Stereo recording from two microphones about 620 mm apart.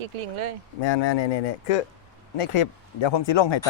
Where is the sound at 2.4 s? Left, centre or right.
Left.